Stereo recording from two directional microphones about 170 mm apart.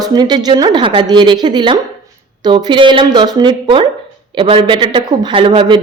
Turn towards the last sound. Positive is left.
turn(degrees=-30)  # may be behind; listen again after turning